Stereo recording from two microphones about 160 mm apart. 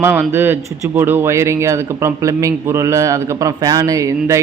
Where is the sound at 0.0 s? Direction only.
15° right (ahead or behind).